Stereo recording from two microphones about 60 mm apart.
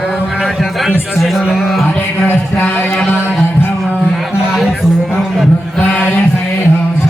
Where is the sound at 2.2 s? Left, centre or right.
Left.